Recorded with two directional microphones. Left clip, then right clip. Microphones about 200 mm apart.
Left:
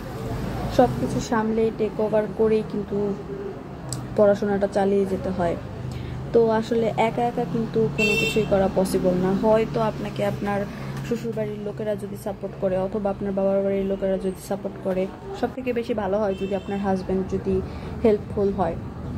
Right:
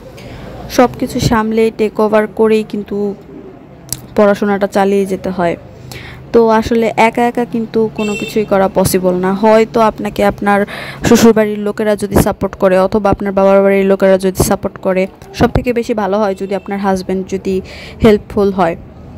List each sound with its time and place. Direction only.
0.7 s speech: 50° right (ahead or behind)
4.1 s a woman's voice: 55° right (ahead or behind)